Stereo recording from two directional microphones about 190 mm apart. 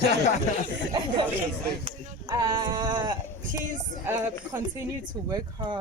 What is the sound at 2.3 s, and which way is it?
Speech, 20° right (ahead or behind).